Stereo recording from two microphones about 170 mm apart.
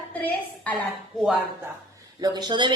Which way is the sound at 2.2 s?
25° right (ahead or behind).